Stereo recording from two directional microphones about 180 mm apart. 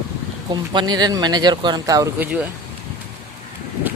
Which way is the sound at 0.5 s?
25° right (ahead or behind).